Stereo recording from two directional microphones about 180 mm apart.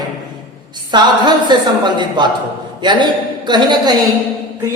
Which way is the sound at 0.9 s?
25° right (ahead or behind).